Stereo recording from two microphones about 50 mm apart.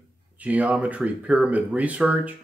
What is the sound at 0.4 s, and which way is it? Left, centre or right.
Speech, right.